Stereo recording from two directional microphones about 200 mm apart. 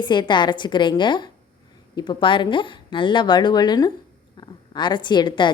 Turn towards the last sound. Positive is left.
turn(degrees=20)  # may be behind; listen again after turning